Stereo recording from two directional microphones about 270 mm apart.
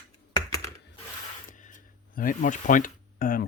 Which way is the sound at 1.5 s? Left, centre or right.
Left.